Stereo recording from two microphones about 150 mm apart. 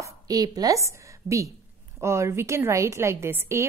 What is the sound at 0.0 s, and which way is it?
A woman's voice, 25° right (ahead or behind).